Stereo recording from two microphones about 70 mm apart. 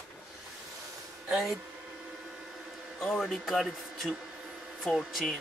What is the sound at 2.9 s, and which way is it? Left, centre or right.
Speech, centre.